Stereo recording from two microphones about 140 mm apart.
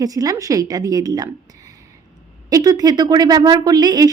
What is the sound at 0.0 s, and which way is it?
A woman's voice, 25° right (ahead or behind).